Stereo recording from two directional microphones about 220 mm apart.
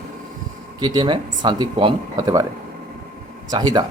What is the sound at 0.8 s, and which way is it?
Speech, 20° right (ahead or behind).